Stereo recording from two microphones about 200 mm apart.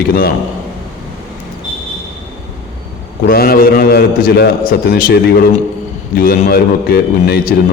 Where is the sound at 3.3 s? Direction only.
50° left (ahead or behind).